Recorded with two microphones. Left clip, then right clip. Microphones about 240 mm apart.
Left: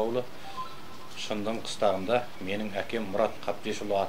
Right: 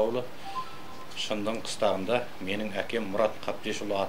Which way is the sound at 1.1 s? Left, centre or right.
Left.